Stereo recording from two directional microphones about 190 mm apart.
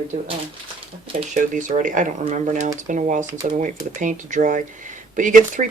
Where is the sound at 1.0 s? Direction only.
40° right (ahead or behind).